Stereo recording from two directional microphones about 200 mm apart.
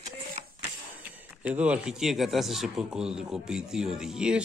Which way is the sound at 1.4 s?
5° right (ahead or behind).